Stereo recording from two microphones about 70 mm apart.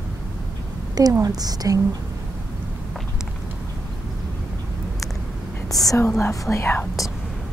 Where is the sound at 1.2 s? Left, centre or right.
Right.